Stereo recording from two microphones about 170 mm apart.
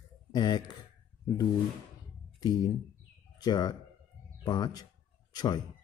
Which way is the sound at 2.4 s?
25° left (ahead or behind).